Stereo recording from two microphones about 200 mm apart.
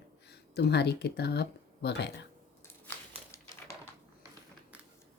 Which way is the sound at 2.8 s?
10° left (ahead or behind).